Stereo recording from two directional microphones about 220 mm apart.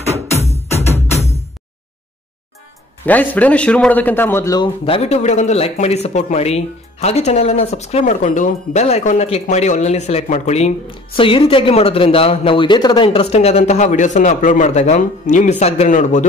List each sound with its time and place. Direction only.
0.5 s music: 30° left (ahead or behind)
3.1 s speech: 5° left (ahead or behind); by 16.3 s 35° left (ahead or behind)